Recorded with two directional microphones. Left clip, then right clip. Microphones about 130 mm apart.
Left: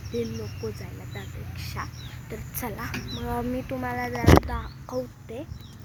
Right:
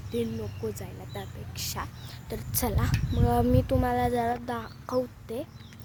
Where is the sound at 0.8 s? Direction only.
60° right (ahead or behind).